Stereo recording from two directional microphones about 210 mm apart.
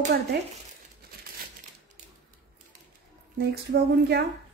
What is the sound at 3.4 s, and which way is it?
Speech, 50° right (ahead or behind).